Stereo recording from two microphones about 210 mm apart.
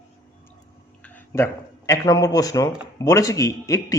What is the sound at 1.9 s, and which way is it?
A man's voice, 15° left (ahead or behind).